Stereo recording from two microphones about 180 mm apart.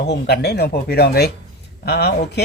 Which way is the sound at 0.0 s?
65° left (ahead or behind).